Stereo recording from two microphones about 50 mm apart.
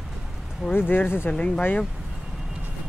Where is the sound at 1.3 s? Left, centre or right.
Left.